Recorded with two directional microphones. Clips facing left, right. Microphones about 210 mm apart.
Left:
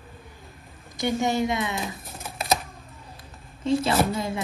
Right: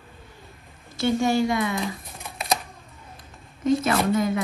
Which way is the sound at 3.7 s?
30° left (ahead or behind).